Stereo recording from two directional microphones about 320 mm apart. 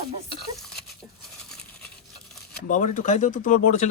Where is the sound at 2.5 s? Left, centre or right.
Left.